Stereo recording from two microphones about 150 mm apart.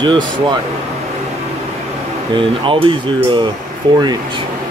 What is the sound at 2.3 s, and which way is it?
Speech, 35° right (ahead or behind).